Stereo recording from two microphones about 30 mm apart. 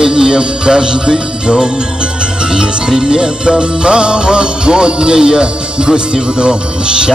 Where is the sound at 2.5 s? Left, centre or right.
Right.